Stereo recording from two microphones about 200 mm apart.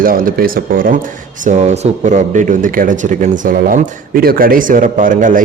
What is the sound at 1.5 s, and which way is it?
A man's voice, 35° right (ahead or behind).